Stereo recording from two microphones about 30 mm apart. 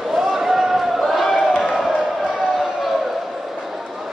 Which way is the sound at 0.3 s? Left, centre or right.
Centre.